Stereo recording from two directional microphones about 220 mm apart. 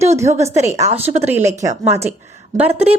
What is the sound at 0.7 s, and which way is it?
A woman's voice, 30° right (ahead or behind).